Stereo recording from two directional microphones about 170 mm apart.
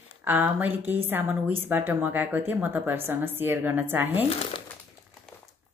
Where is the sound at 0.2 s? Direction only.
10° right (ahead or behind).